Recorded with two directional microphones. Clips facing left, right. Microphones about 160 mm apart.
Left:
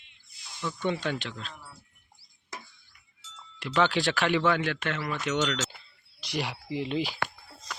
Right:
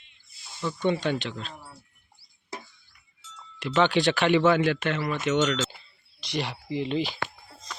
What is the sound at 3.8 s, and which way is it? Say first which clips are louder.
Speech: right 3 dB; centre (ahead or behind).